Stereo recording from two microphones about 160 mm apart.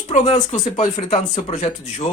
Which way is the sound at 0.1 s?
45° left (ahead or behind).